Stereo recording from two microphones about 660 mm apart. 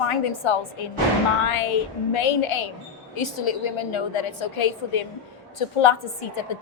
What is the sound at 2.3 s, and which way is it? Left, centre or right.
A woman's voice, left.